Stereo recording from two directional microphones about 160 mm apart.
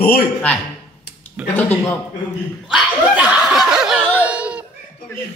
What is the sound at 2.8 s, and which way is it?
Laughter, 5° right (ahead or behind).